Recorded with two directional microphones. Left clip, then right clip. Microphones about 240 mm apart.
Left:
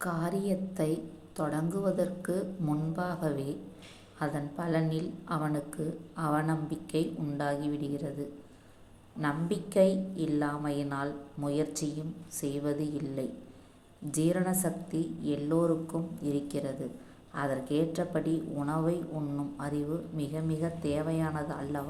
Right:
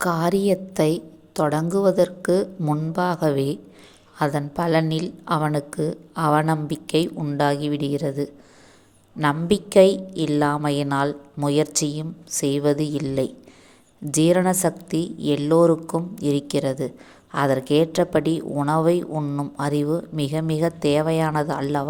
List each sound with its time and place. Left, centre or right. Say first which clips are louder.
0.0 s a woman's voice: right 13 dB; right